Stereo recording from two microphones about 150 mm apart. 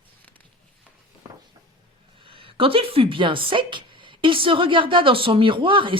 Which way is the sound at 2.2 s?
35° right (ahead or behind).